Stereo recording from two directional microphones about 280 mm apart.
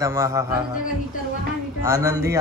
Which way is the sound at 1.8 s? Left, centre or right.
Centre.